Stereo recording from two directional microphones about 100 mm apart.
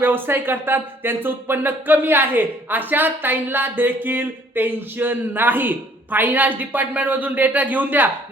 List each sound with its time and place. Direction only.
0.0 s speech: 20° right (ahead or behind)